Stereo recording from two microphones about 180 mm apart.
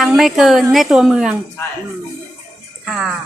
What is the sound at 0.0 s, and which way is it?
A woman's voice, centre (ahead or behind).